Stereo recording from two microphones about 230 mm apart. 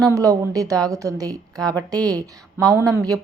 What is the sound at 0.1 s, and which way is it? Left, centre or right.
A woman's voice, centre.